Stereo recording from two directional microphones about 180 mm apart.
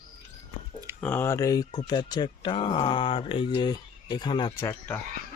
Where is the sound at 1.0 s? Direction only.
10° left (ahead or behind).